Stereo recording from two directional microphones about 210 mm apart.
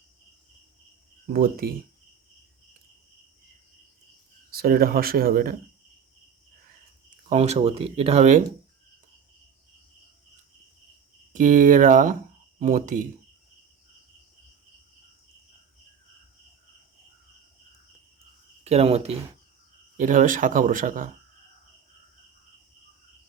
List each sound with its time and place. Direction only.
1.3 s speech: 45° right (ahead or behind)
4.5 s speech: 45° right (ahead or behind)
7.3 s speech: 30° right (ahead or behind)
11.3 s speech: 40° right (ahead or behind)
18.6 s speech: 30° right (ahead or behind)